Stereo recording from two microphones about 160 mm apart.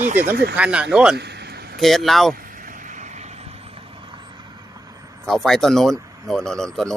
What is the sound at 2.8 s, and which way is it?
Vehicle, 50° right (ahead or behind).